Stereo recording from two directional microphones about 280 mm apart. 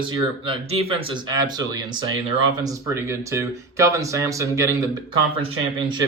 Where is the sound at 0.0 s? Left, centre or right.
Centre.